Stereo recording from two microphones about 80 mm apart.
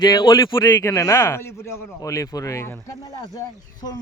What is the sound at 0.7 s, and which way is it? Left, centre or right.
Speech, left.